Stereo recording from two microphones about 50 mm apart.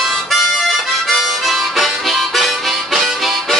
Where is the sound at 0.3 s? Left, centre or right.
Centre.